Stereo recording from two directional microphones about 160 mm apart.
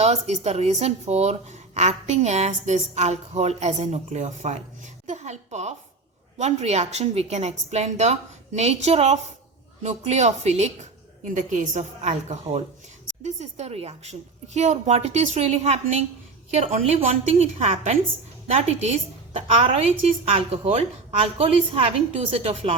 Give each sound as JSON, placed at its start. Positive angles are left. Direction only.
{"t": 0.0, "sound": "a woman's voice", "side_deg": -45}